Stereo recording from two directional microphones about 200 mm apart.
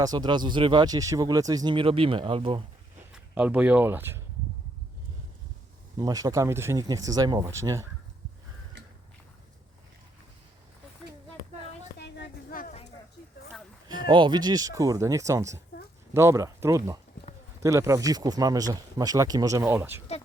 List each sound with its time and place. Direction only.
0.0 s speech: 20° right (ahead or behind)
3.1 s speech: 5° right (ahead or behind)
6.0 s speech: 20° right (ahead or behind)
11.9 s a sound: 60° left (ahead or behind)
14.1 s speech: 25° right (ahead or behind)